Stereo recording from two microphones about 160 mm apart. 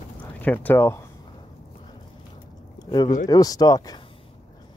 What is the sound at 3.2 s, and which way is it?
Speech, 25° left (ahead or behind).